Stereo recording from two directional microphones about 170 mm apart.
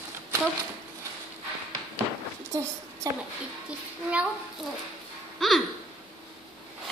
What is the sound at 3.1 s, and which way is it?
Speech, 20° right (ahead or behind).